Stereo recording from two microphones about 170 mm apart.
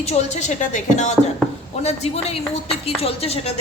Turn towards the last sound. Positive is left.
turn(degrees=40)  # may be behind; listen again after turning